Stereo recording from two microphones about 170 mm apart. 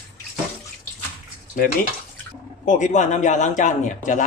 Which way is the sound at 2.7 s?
45° left (ahead or behind).